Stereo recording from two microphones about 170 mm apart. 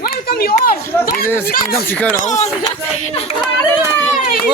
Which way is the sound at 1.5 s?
60° left (ahead or behind).